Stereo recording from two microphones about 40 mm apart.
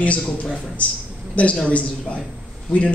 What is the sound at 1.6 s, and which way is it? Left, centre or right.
Speech, left.